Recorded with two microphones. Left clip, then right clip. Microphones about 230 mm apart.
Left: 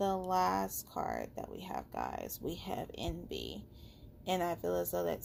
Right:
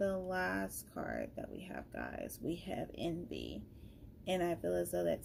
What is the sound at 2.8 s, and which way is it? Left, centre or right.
Speech, left.